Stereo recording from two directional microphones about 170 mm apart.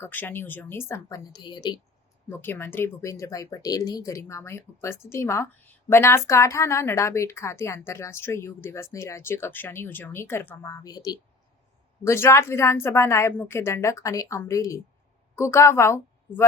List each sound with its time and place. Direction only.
0.0 s speech: 10° left (ahead or behind)
2.3 s speech: 15° left (ahead or behind)